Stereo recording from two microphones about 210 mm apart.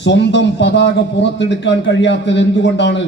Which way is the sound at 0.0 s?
55° left (ahead or behind).